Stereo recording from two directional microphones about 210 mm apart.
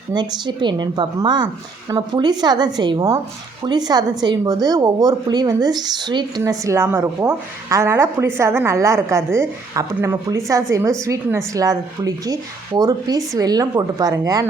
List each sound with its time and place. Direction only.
0.1 s a woman's voice: 20° right (ahead or behind)